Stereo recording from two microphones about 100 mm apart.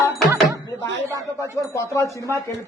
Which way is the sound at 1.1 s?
35° right (ahead or behind).